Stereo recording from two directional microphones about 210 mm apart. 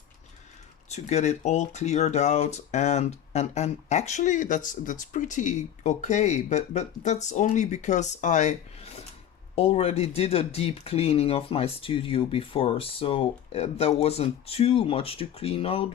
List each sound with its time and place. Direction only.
0.9 s speech: 30° left (ahead or behind)